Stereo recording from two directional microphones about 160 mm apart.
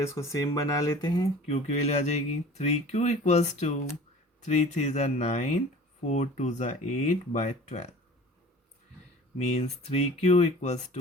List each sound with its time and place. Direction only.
0.0 s speech: 20° left (ahead or behind)
1.5 s speech: 40° left (ahead or behind)
9.4 s speech: 40° left (ahead or behind)